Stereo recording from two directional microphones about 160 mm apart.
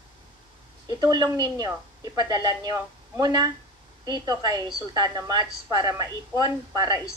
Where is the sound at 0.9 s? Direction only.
25° right (ahead or behind).